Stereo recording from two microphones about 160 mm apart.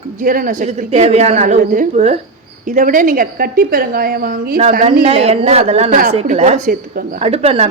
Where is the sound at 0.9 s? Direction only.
40° right (ahead or behind); by 4.6 s 60° right (ahead or behind).